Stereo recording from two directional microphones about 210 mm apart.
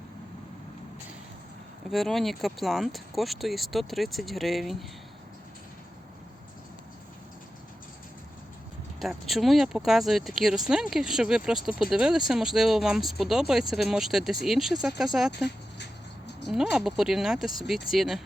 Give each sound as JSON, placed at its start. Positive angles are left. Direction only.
{"t": 1.9, "sound": "speech", "side_deg": 0}
{"t": 9.0, "sound": "speech", "side_deg": 0}
{"t": 15.4, "sound": "a sound", "side_deg": 55}
{"t": 16.5, "sound": "speech", "side_deg": 0}